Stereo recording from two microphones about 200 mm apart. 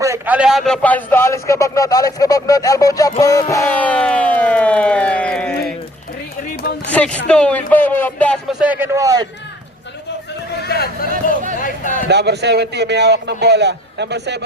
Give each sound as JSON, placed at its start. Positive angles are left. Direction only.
{"t": 0.0, "sound": "a man's voice", "side_deg": -10}
{"t": 6.9, "sound": "a man's voice", "side_deg": 5}
{"t": 10.7, "sound": "speech", "side_deg": 50}
{"t": 11.6, "sound": "speech", "side_deg": 40}
{"t": 12.0, "sound": "a man's voice", "side_deg": -55}